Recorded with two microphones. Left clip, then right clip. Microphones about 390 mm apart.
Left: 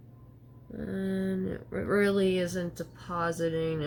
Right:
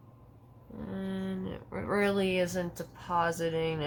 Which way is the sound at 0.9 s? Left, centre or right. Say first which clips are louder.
Left 5 dB; right.